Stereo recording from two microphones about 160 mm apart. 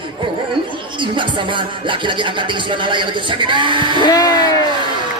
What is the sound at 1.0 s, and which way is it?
Speech, 30° right (ahead or behind).